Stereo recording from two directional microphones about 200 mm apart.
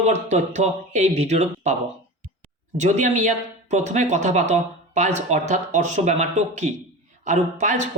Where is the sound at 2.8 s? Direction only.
35° right (ahead or behind).